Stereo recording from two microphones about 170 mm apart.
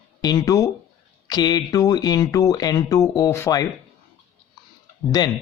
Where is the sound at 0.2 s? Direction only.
25° left (ahead or behind).